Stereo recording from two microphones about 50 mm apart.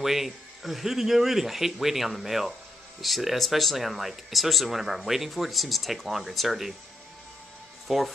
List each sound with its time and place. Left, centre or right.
0.0 s speech: centre
7.9 s speech: centre